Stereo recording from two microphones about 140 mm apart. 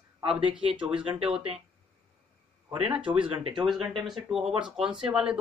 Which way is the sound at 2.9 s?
10° right (ahead or behind).